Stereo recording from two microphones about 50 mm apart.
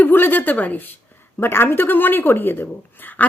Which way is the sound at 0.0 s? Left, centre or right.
Left.